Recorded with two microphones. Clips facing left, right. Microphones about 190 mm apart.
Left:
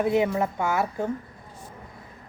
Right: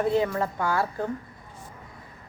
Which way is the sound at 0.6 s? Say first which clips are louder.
Right 1 dB; 20° left (ahead or behind).